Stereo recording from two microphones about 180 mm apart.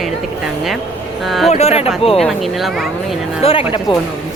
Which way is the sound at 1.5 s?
35° left (ahead or behind).